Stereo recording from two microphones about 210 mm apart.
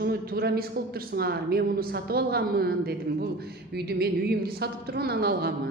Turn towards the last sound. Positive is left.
turn(degrees=-50)  # may be behind; listen again after turning